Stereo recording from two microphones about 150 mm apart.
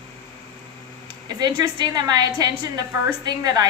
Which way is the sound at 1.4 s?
25° right (ahead or behind).